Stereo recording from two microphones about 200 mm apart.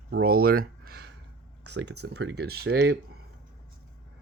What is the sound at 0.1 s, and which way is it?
Speech, 50° right (ahead or behind).